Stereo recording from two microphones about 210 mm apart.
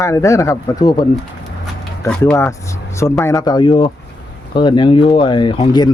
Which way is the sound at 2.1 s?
10° left (ahead or behind).